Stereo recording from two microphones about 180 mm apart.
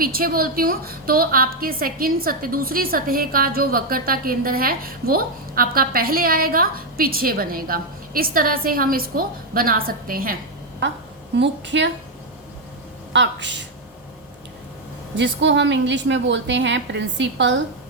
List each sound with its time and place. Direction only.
0.0 s a woman's voice: 55° right (ahead or behind)
11.3 s a woman's voice: 80° right
13.1 s a woman's voice: 80° right
15.1 s a woman's voice: 80° right